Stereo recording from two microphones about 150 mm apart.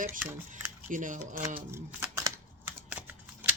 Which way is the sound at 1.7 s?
15° right (ahead or behind).